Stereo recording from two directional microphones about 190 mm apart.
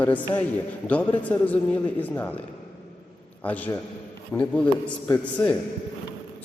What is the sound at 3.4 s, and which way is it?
A man's voice, 10° left (ahead or behind).